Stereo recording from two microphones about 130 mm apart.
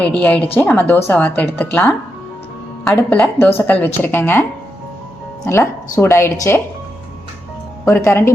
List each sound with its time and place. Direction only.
0.0 s a woman's voice: 10° left (ahead or behind)
3.1 s a woman's voice: 10° left (ahead or behind)
5.5 s a woman's voice: 20° left (ahead or behind)
7.9 s a woman's voice: 20° left (ahead or behind)